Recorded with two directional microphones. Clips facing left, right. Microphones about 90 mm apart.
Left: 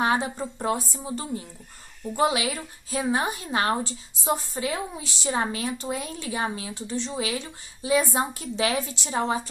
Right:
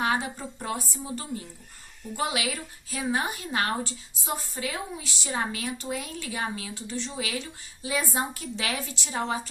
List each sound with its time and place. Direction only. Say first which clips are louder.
0.0 s a woman's voice: left 3 dB; 30° left (ahead or behind)